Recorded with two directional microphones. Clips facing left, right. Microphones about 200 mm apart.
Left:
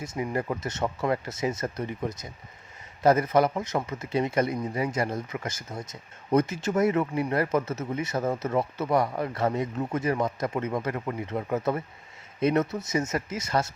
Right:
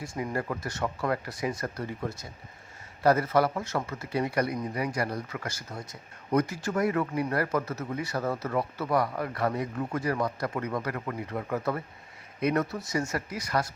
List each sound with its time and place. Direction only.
0.0 s speech: 20° left (ahead or behind)